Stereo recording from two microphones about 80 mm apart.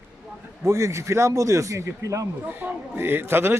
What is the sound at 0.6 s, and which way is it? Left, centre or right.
Speech, right.